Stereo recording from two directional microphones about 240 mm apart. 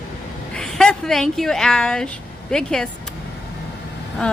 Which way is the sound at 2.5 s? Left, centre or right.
Centre.